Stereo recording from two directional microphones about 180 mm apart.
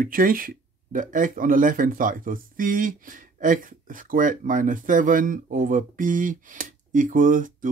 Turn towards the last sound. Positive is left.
turn(degrees=-45)  # may be behind; listen again after turning